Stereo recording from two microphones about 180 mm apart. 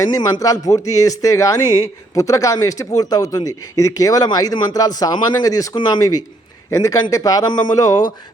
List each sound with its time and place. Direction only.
0.0 s speech: 20° left (ahead or behind)